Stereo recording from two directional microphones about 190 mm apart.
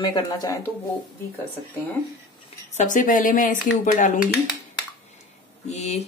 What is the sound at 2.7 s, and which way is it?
A woman's voice, 45° left (ahead or behind).